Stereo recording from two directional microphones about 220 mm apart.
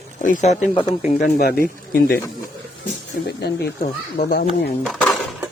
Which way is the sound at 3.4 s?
45° left (ahead or behind).